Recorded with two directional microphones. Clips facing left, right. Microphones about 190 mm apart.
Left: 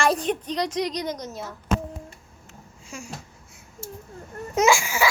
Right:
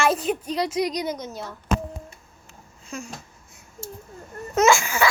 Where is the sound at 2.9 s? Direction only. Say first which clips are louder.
Right 4 dB; 10° left (ahead or behind).